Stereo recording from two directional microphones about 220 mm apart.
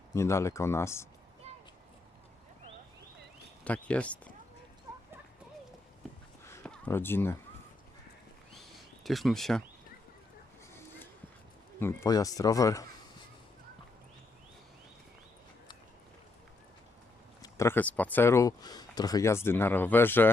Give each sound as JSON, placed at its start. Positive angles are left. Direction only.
{"t": 0.1, "sound": "speech", "side_deg": 15}
{"t": 3.6, "sound": "speech", "side_deg": 5}
{"t": 6.4, "sound": "a sound", "side_deg": 10}
{"t": 9.0, "sound": "speech", "side_deg": 0}
{"t": 11.8, "sound": "speech", "side_deg": 10}
{"t": 17.4, "sound": "speech", "side_deg": 10}